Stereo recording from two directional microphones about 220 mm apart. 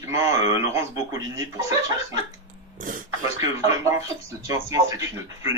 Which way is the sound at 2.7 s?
40° right (ahead or behind).